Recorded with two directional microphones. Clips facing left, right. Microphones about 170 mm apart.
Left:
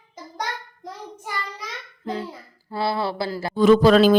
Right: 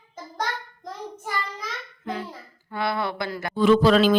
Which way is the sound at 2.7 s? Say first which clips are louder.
Left 2 dB; 30° left (ahead or behind).